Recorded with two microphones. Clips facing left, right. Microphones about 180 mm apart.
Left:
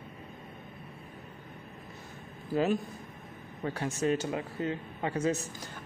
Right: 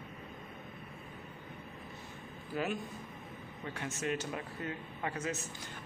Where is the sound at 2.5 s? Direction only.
35° left (ahead or behind).